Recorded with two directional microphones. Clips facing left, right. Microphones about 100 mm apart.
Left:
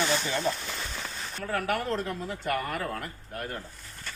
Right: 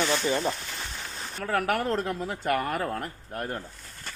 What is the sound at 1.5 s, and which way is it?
Speech, 50° right (ahead or behind).